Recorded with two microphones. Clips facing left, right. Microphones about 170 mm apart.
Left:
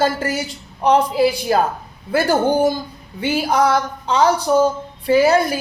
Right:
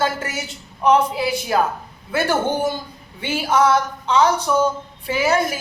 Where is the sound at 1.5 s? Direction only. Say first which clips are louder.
Right 1 dB; 40° left (ahead or behind).